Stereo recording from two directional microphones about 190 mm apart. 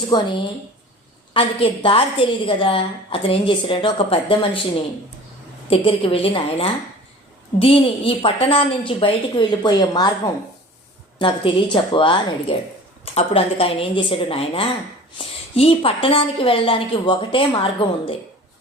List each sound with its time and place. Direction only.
0.1 s a woman's voice: 20° left (ahead or behind)
1.3 s a woman's voice: 30° left (ahead or behind)
11.2 s a woman's voice: 25° left (ahead or behind)